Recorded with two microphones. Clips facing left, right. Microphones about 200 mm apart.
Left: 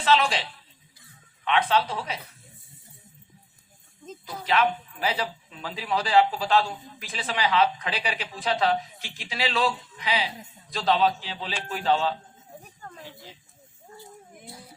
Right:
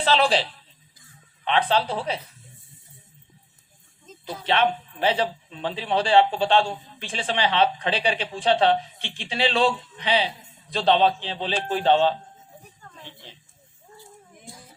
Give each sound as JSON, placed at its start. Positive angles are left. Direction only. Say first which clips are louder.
{"t": 0.0, "sound": "speech", "louder": "right 2 dB", "side_deg": -35}
{"t": 1.5, "sound": "speech", "louder": "right 1 dB", "side_deg": -35}
{"t": 4.3, "sound": "a man's voice", "louder": "right 2 dB", "side_deg": -30}